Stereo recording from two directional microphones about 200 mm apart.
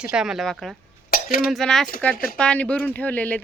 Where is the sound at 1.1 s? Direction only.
45° left (ahead or behind).